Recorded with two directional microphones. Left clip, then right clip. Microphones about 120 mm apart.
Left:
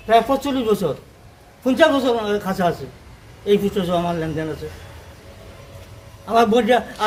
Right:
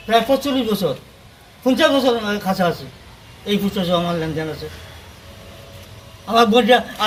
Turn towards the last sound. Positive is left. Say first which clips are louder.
# right 3 dB
turn(degrees=15)  # may be behind; listen again after turning